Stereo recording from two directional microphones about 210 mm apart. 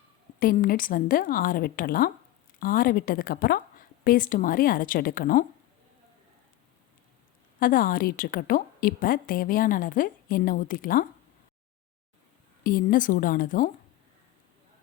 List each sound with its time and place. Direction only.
0.3 s a woman's voice: 40° left (ahead or behind)
7.6 s a woman's voice: 40° left (ahead or behind)
12.6 s speech: 40° left (ahead or behind)